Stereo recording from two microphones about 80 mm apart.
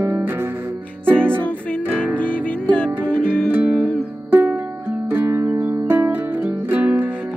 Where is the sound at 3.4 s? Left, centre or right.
Right.